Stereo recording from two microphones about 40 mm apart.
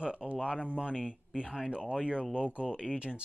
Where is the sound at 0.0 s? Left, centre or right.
Right.